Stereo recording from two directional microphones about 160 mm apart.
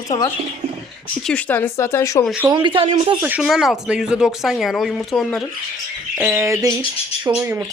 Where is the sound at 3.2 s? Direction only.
5° right (ahead or behind).